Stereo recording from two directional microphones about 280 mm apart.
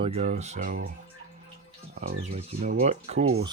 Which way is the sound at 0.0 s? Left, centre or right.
Right.